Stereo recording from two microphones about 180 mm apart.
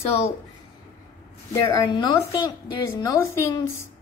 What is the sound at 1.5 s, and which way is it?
A woman's voice, 20° left (ahead or behind).